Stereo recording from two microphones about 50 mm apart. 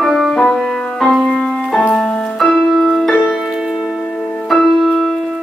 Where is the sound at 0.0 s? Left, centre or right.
Centre.